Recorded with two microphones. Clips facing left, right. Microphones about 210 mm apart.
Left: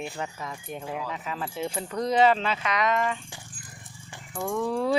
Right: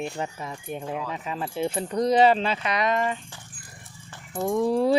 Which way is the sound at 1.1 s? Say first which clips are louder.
Right 3 dB; 25° right (ahead or behind).